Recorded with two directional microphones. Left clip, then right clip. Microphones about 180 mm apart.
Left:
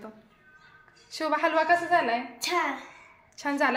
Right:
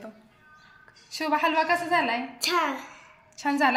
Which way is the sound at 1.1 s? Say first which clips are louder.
Right 1 dB; 25° left (ahead or behind).